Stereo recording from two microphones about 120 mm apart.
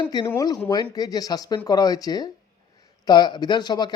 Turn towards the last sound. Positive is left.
turn(degrees=35)  # may be behind; listen again after turning